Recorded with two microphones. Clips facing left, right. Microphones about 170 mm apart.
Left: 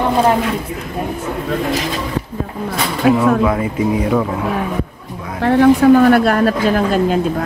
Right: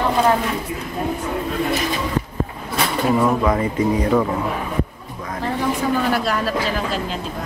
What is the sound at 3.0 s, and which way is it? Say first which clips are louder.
Speech: left 7 dB; 90° left.